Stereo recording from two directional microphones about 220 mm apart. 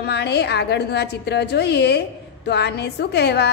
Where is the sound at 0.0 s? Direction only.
50° left (ahead or behind).